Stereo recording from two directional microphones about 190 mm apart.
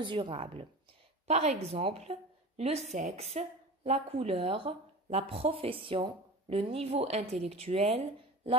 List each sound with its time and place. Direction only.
0.0 s a woman's voice: 25° right (ahead or behind)